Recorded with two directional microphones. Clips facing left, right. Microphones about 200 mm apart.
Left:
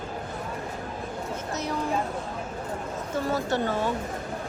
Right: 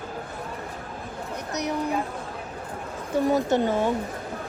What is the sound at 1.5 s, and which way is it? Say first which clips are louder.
Speech: right 4 dB; 20° right (ahead or behind).